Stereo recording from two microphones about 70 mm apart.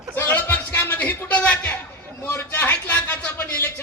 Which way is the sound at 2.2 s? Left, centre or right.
Left.